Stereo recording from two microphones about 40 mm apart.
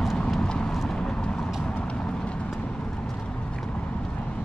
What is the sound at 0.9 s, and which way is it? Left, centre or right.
Vehicle, left.